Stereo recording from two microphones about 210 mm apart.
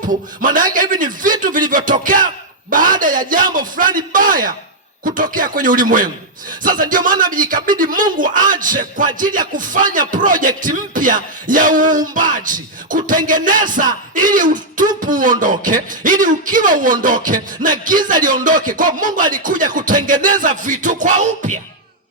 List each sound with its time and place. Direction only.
0.1 s rapping: 40° right (ahead or behind)